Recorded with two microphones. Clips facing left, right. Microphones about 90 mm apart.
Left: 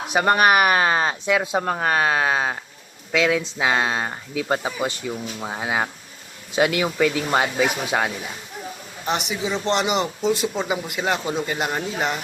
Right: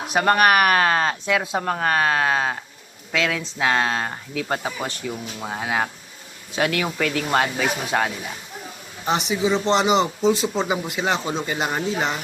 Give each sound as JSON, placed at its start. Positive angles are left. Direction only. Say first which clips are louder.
{"t": 0.1, "sound": "a man's voice", "louder": "even", "side_deg": 10}
{"t": 9.3, "sound": "a man's voice", "louder": "right 5 dB", "side_deg": 0}